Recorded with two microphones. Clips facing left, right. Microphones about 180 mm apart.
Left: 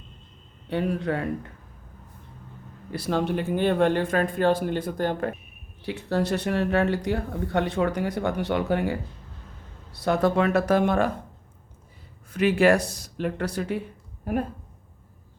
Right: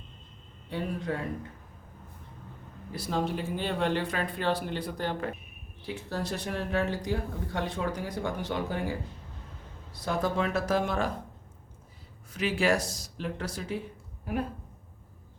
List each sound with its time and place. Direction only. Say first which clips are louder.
0.7 s speech: left 7 dB; 70° left (ahead or behind)
2.9 s speech: left 5 dB; 70° left (ahead or behind); by 5.3 s 50° left (ahead or behind)
5.8 s speech: left 8 dB; 70° left (ahead or behind)
12.3 s speech: left 7 dB; 60° left (ahead or behind)
14.3 s speech: left 5 dB; 50° left (ahead or behind)